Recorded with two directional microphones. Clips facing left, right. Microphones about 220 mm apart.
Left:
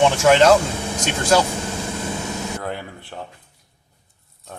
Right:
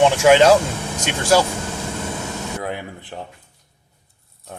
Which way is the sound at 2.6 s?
15° right (ahead or behind).